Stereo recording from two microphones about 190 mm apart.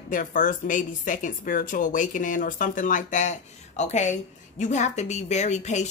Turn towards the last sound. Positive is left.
turn(degrees=40)  # may be behind; listen again after turning